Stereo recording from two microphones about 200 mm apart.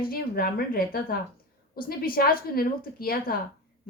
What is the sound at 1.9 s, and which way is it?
A woman's voice, 45° left (ahead or behind).